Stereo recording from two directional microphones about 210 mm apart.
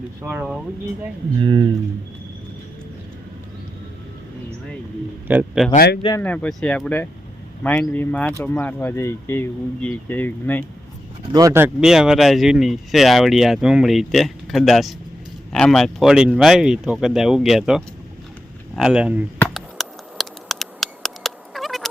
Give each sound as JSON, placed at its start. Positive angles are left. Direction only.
{"t": 0.2, "sound": "speech", "side_deg": -10}
{"t": 1.4, "sound": "speech", "side_deg": -25}
{"t": 5.3, "sound": "speech", "side_deg": -5}
{"t": 5.7, "sound": "a man's voice", "side_deg": 50}
{"t": 6.0, "sound": "speech", "side_deg": 20}
{"t": 6.2, "sound": "speech", "side_deg": 5}
{"t": 11.3, "sound": "speech", "side_deg": -15}
{"t": 19.4, "sound": "a sound", "side_deg": 0}